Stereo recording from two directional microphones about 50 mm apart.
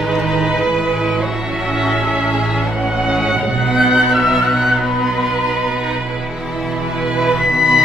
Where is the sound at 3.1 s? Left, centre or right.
Centre.